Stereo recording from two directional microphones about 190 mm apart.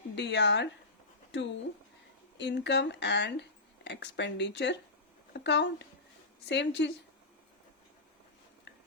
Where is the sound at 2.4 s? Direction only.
65° left (ahead or behind).